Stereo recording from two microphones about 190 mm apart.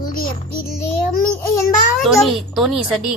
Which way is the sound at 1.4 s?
15° left (ahead or behind).